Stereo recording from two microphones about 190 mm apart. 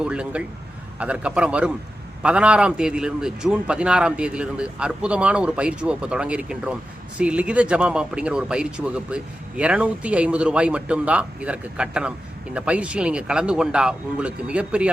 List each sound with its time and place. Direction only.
0.0 s a man's voice: 5° right (ahead or behind)